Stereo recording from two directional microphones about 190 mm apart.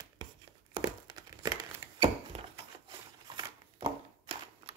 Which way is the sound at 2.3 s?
35° right (ahead or behind).